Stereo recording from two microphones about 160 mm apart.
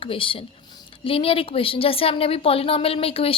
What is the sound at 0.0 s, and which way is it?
A woman's voice, 35° left (ahead or behind).